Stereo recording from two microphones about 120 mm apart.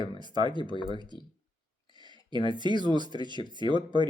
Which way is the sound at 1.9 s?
40° right (ahead or behind).